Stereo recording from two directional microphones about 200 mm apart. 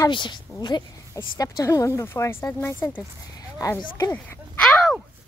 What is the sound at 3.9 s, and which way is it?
Speech, 20° left (ahead or behind).